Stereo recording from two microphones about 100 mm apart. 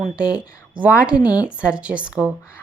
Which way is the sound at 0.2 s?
10° right (ahead or behind).